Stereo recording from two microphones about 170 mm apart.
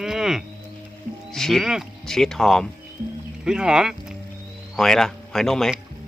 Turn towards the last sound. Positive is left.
turn(degrees=0)  # may be behind; listen again after turning